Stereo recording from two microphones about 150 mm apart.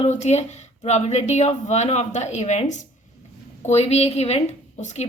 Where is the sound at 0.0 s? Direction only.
45° left (ahead or behind).